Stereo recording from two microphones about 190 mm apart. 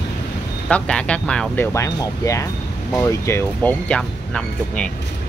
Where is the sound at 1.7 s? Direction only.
15° left (ahead or behind).